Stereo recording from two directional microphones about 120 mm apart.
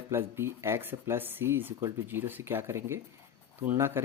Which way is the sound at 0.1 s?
20° right (ahead or behind).